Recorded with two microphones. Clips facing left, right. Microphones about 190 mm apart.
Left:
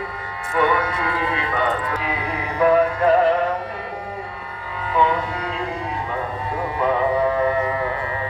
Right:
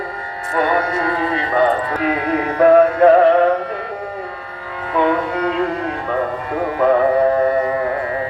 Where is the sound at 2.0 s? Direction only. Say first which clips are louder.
Right 8 dB; 55° right (ahead or behind).